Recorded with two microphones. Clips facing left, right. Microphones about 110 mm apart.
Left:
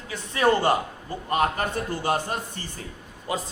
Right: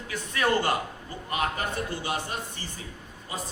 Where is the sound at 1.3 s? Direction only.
40° left (ahead or behind).